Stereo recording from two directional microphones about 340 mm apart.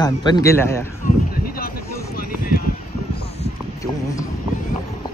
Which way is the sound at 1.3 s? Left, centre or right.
Left.